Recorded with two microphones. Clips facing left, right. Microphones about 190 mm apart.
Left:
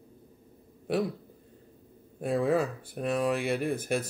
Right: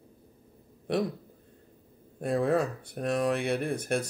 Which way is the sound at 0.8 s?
5° left (ahead or behind).